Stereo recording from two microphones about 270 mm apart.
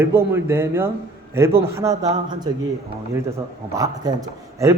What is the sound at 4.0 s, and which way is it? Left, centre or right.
Speech, centre.